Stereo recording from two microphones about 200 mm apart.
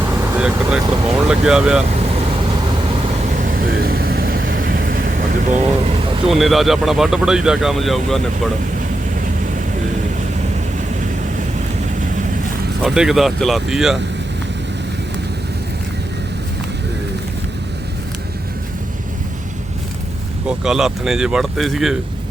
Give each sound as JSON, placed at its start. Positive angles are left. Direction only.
{"t": 0.3, "sound": "speech", "side_deg": -5}
{"t": 3.3, "sound": "vehicle", "side_deg": -45}
{"t": 5.5, "sound": "speech", "side_deg": -40}
{"t": 6.2, "sound": "speech", "side_deg": 0}
{"t": 12.8, "sound": "speech", "side_deg": 0}
{"t": 20.5, "sound": "speech", "side_deg": -5}